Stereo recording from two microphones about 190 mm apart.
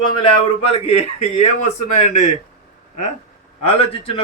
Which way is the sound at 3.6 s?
30° left (ahead or behind).